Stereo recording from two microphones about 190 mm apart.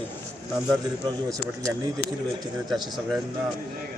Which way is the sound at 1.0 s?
20° right (ahead or behind).